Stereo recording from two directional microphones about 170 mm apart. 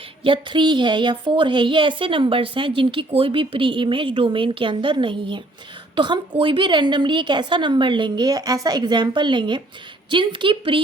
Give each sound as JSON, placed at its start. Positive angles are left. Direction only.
{"t": 0.3, "sound": "a woman's voice", "side_deg": -25}